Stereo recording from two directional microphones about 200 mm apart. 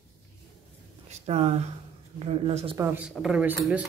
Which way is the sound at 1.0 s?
35° right (ahead or behind).